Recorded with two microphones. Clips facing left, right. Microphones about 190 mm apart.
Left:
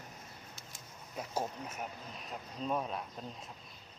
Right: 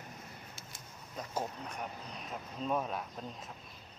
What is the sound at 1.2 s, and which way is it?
Speech, 5° left (ahead or behind).